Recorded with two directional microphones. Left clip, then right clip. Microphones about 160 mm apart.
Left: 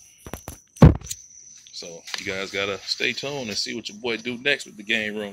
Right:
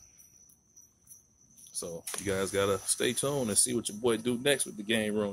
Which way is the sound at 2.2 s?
25° right (ahead or behind).